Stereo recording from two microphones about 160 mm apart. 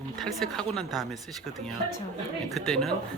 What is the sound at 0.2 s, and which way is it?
A woman's voice, centre (ahead or behind).